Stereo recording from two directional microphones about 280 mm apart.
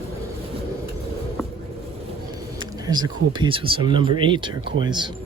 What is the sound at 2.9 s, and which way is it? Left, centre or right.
Speech, centre.